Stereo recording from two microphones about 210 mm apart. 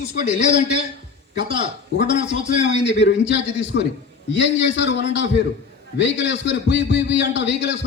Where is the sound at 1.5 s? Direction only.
50° left (ahead or behind).